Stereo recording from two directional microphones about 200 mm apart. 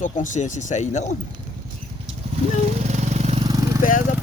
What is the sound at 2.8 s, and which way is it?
Vehicle, 35° right (ahead or behind).